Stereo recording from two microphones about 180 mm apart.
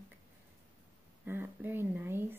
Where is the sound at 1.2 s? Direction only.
10° right (ahead or behind).